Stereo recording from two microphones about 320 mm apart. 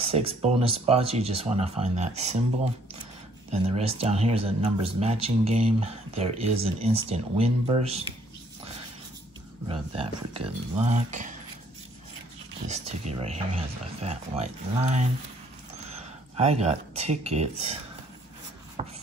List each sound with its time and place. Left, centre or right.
0.0 s speech: centre
3.6 s speech: centre
9.7 s speech: centre
12.6 s speech: right
16.3 s speech: right
18.8 s shuffle: centre